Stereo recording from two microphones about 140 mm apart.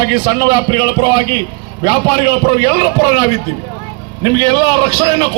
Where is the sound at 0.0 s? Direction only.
30° right (ahead or behind).